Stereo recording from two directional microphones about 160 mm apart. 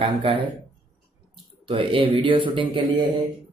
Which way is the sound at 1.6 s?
35° right (ahead or behind).